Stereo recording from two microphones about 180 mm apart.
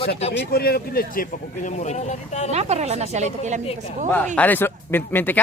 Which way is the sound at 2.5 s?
35° right (ahead or behind).